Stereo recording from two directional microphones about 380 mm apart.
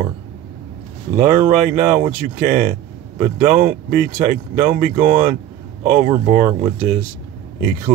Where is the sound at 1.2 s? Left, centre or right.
Centre.